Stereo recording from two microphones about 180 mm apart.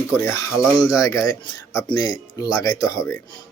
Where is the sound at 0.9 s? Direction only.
20° left (ahead or behind).